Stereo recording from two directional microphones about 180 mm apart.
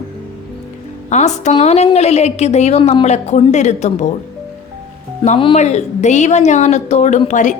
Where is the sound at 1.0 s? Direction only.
40° left (ahead or behind).